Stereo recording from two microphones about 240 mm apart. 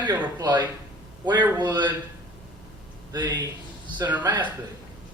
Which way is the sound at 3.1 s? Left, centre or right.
Centre.